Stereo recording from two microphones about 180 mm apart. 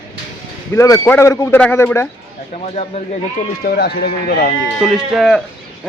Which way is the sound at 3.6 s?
65° left (ahead or behind).